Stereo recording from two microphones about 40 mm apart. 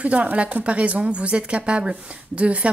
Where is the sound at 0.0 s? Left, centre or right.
Right.